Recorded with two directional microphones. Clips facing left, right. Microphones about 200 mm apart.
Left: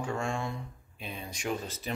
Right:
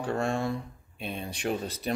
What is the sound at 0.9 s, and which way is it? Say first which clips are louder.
Speech: right 5 dB; 60° right (ahead or behind).